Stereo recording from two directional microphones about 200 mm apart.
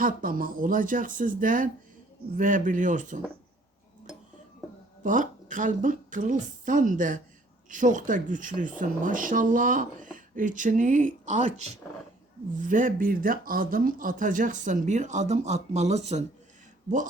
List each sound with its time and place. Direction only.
0.0 s speech: 45° right (ahead or behind)
5.0 s speech: 40° right (ahead or behind)